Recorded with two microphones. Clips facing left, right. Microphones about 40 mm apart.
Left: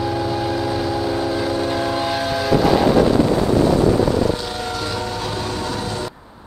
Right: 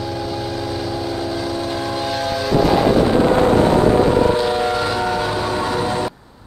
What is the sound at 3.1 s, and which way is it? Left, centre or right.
Train, right.